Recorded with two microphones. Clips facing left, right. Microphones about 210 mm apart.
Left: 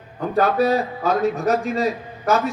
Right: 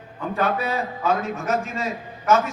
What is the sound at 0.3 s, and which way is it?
A man's voice, 35° left (ahead or behind).